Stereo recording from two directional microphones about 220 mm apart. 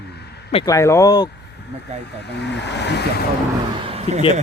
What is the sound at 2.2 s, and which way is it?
Speech, 50° left (ahead or behind).